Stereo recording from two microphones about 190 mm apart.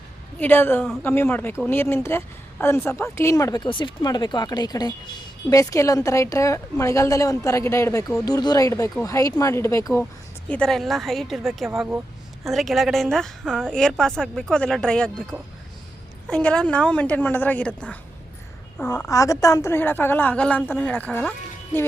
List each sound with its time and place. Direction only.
0.3 s a woman's voice: 10° left (ahead or behind)
10.5 s a woman's voice: 5° left (ahead or behind)